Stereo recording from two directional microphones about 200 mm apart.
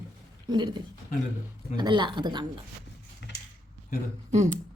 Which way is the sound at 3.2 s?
60° left (ahead or behind).